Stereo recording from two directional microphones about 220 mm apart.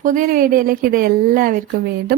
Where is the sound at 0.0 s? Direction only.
35° right (ahead or behind).